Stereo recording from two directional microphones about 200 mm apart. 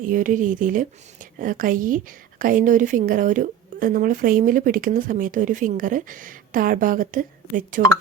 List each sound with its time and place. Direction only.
0.0 s a woman's voice: 40° right (ahead or behind)